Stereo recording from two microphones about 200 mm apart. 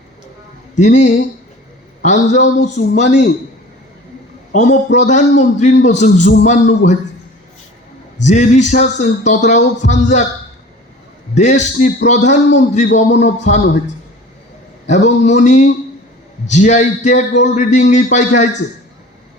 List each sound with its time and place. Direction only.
0.8 s a man's voice: 35° left (ahead or behind)
4.5 s a man's voice: 35° left (ahead or behind)
8.2 s a man's voice: 35° left (ahead or behind)
11.3 s a man's voice: 35° left (ahead or behind)
14.8 s a man's voice: 35° left (ahead or behind)